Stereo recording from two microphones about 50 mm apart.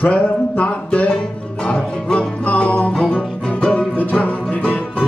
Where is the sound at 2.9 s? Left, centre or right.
Centre.